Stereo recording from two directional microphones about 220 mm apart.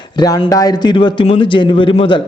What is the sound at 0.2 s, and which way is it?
A man's voice, 20° left (ahead or behind).